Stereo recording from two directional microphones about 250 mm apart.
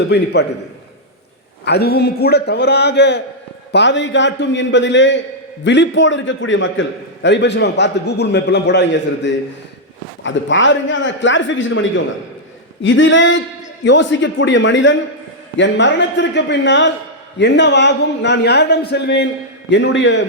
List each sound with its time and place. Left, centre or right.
0.0 s a man's voice: left
1.6 s a man's voice: left